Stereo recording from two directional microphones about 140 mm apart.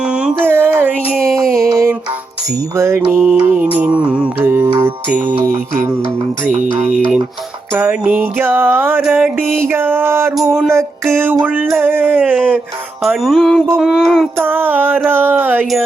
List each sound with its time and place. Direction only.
0.0 s a sound: 5° right (ahead or behind)
2.7 s mantra: 20° right (ahead or behind)
4.8 s music: 15° right (ahead or behind)
6.5 s music: 60° right (ahead or behind)
7.7 s music: 15° right (ahead or behind)
14.3 s music: 15° right (ahead or behind)